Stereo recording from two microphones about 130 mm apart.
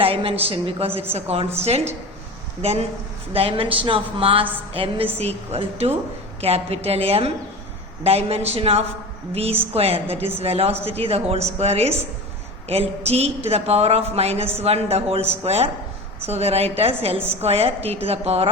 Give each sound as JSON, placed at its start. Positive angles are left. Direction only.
{"t": 0.0, "sound": "a woman's voice", "side_deg": -45}
{"t": 2.6, "sound": "a woman's voice", "side_deg": -55}
{"t": 13.1, "sound": "a woman's voice", "side_deg": -55}